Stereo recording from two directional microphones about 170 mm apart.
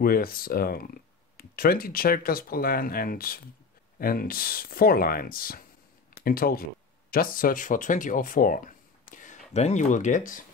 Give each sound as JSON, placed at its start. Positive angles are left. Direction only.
{"t": 0.0, "sound": "speech", "side_deg": 60}